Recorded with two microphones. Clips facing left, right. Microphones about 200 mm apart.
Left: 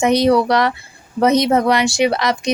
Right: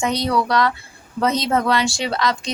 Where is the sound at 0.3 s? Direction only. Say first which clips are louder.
Left 5 dB; 25° left (ahead or behind).